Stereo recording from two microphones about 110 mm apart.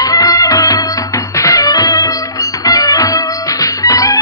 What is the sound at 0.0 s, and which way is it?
Music, 35° left (ahead or behind).